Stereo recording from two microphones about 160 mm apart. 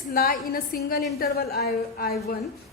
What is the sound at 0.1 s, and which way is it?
A woman's voice, 65° left (ahead or behind).